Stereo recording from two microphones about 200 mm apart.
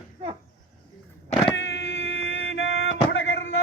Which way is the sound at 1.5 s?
70° left (ahead or behind).